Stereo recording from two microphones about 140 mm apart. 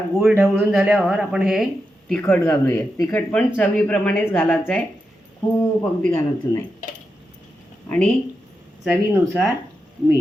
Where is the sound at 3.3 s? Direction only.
10° left (ahead or behind).